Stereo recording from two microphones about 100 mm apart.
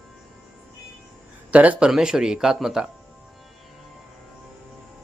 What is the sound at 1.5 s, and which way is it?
Speech, 15° right (ahead or behind).